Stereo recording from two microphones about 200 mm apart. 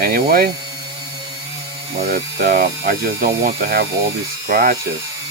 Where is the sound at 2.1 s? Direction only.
50° right (ahead or behind).